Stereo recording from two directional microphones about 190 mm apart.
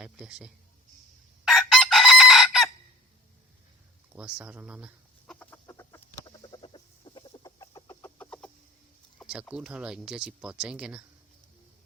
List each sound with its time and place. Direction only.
0.0 s speech: 5° right (ahead or behind)
1.5 s chicken: centre (ahead or behind)
4.1 s speech: 5° right (ahead or behind)
5.2 s chicken: 5° left (ahead or behind)
9.2 s speech: 5° right (ahead or behind)